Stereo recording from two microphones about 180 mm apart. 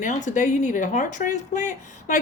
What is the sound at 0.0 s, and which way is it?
A woman's voice, 45° left (ahead or behind).